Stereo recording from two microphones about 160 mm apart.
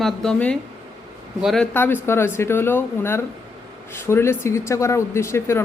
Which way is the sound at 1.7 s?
15° left (ahead or behind).